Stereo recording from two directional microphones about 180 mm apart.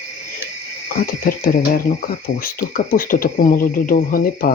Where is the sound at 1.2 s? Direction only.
55° left (ahead or behind).